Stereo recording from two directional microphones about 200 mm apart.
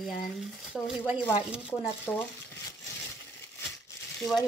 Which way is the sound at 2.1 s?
10° left (ahead or behind).